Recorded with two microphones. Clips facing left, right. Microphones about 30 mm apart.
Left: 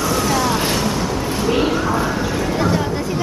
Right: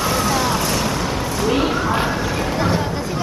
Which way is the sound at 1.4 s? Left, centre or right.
Centre.